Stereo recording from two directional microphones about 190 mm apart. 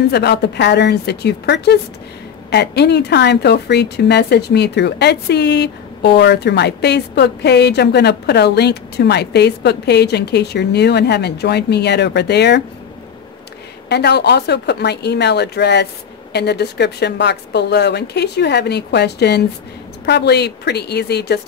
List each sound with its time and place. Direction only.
0.1 s a woman's voice: 60° left (ahead or behind)
13.8 s a woman's voice: 60° left (ahead or behind)